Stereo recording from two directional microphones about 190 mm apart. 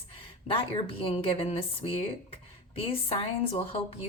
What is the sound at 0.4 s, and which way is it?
Speech, 30° left (ahead or behind).